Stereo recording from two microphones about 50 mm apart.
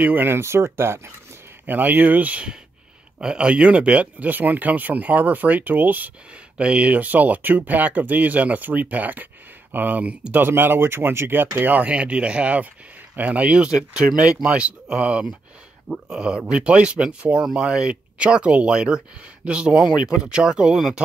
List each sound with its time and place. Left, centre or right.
0.0 s speech: right
0.4 s speech: right
1.7 s speech: right
3.2 s speech: centre
4.3 s speech: right
6.5 s speech: right
11.8 s speech: right